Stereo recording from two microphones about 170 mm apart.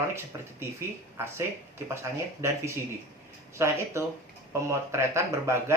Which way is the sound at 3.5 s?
15° right (ahead or behind).